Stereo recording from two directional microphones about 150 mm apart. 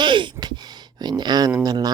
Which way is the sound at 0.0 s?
30° right (ahead or behind).